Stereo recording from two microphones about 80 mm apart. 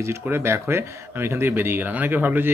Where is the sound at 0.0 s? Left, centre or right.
Right.